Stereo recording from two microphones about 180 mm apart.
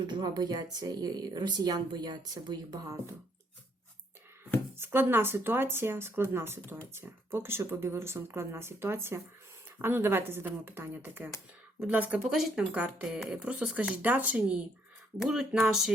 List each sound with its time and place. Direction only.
0.1 s speech: 20° right (ahead or behind)
4.8 s speech: 10° right (ahead or behind)